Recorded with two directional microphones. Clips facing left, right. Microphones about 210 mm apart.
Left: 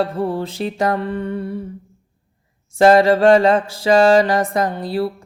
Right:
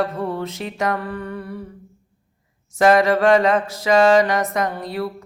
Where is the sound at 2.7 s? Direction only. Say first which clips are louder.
Left 3 dB; 30° left (ahead or behind).